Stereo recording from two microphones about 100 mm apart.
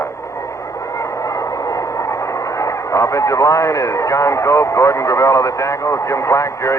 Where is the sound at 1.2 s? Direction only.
35° left (ahead or behind).